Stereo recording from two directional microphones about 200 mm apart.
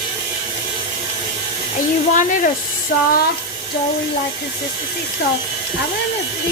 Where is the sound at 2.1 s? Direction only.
40° left (ahead or behind).